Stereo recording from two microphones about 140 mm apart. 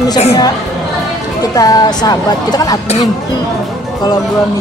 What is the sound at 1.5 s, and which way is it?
Speech, 25° left (ahead or behind).